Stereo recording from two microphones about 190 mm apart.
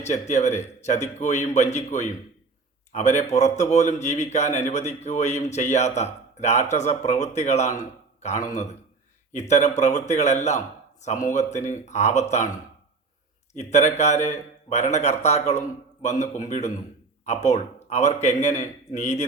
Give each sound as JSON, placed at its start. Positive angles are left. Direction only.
{"t": 0.0, "sound": "a man's voice", "side_deg": 40}
{"t": 13.5, "sound": "a man's voice", "side_deg": 35}